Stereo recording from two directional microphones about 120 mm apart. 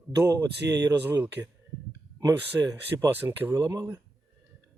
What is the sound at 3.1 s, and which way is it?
Speech, 15° right (ahead or behind).